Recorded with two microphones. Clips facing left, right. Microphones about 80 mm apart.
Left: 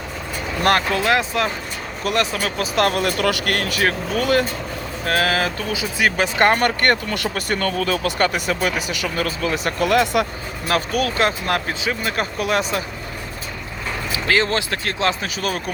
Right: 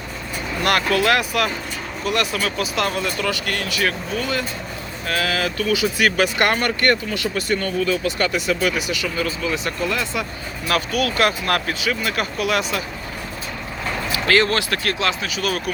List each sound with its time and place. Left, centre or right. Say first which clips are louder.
0.6 s speech: even; left
2.1 s speech: left 1 dB; left
5.0 s speech: left 3 dB; left
5.7 s speech: right 2 dB; left
7.1 s speech: right 1 dB; left
9.8 s speech: left 9 dB; left
10.7 s speech: left 1 dB; left
14.1 s speech: right 1 dB; centre